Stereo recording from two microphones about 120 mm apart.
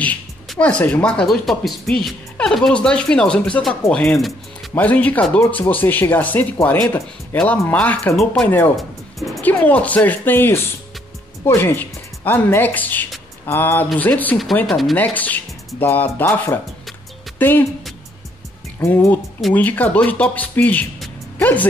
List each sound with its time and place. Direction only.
0.6 s speech: 10° left (ahead or behind)
8.7 s music: centre (ahead or behind)
9.4 s speech: 15° left (ahead or behind)
14.7 s speech: centre (ahead or behind)
15.0 s speech: 15° left (ahead or behind)
18.8 s speech: 20° left (ahead or behind)